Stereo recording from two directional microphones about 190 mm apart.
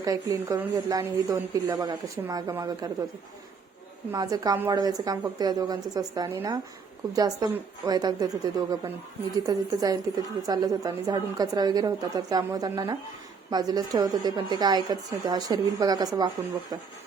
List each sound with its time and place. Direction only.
0.0 s a woman's voice: 20° right (ahead or behind)
4.1 s a woman's voice: 20° right (ahead or behind)